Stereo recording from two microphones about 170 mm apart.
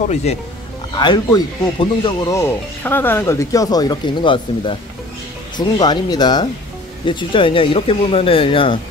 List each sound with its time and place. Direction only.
0.1 s speech: 40° left (ahead or behind)
0.9 s speech: 25° left (ahead or behind)